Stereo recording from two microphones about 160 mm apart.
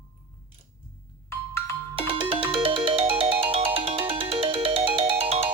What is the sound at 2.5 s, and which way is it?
Ringtone, 35° right (ahead or behind).